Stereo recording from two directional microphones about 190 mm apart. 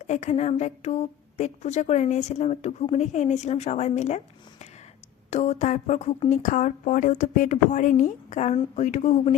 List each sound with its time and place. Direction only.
0.0 s speech: 35° left (ahead or behind)
5.3 s speech: 35° left (ahead or behind)